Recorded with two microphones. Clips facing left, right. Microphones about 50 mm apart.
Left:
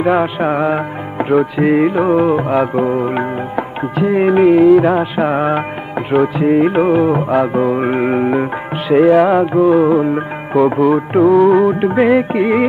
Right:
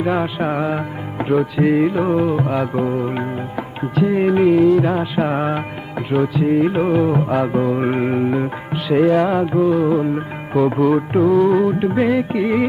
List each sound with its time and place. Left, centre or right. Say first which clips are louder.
0.0 s music: left 5 dB; centre
6.1 s music: left 4 dB; left
8.9 s music: left 5 dB; centre
10.8 s music: left 3 dB; centre
11.8 s music: left 5 dB; left